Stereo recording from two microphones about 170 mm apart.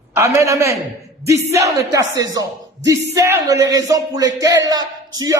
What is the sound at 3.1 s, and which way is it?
Speech, 15° right (ahead or behind).